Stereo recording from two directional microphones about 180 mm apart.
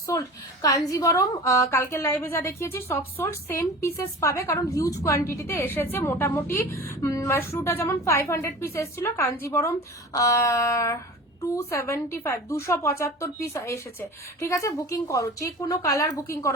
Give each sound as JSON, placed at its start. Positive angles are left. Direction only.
{"t": 0.6, "sound": "a woman's voice", "side_deg": 20}